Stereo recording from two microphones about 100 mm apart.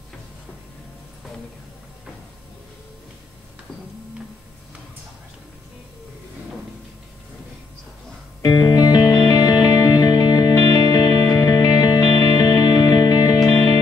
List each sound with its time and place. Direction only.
8.5 s music: 40° left (ahead or behind)